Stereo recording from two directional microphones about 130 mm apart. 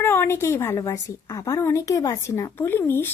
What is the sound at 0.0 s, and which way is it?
A woman's voice, 20° left (ahead or behind).